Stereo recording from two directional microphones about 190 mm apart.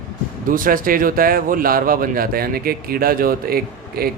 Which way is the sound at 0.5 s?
45° right (ahead or behind).